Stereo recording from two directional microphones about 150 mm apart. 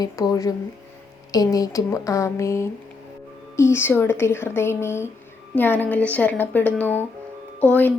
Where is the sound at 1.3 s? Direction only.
25° left (ahead or behind).